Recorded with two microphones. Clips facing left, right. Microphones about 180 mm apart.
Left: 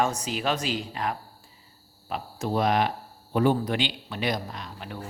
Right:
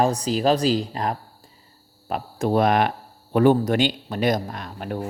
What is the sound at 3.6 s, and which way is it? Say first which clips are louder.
A man's voice: right 7 dB; 45° right (ahead or behind).